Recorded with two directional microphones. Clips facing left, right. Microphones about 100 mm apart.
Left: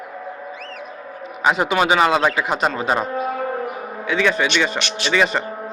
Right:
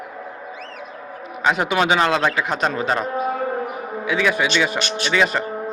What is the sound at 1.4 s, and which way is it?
A man's voice, 5° left (ahead or behind).